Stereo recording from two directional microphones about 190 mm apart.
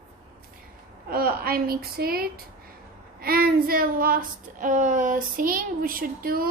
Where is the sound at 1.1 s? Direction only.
50° right (ahead or behind).